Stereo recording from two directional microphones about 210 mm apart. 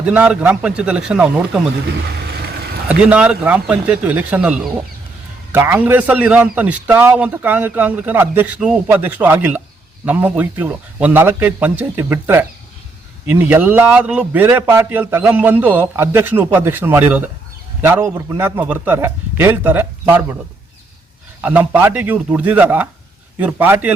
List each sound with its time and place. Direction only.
0.0 s speech: 5° right (ahead or behind)
1.9 s vehicle: 50° right (ahead or behind)
2.9 s a man's voice: 5° right (ahead or behind)
21.4 s a man's voice: 10° right (ahead or behind)